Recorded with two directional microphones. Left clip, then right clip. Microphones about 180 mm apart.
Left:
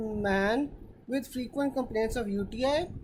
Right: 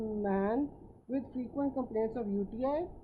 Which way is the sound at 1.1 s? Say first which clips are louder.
Left 4 dB; 25° left (ahead or behind).